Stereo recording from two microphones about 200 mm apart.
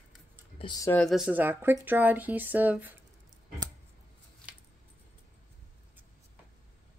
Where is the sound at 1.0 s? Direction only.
Centre (ahead or behind).